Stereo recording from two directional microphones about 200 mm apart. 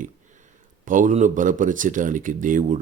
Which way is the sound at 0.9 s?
40° right (ahead or behind).